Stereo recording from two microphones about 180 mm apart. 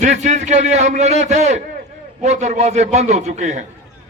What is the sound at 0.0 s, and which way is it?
A man's voice, 40° right (ahead or behind).